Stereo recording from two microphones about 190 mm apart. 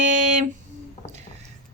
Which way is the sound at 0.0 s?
40° right (ahead or behind).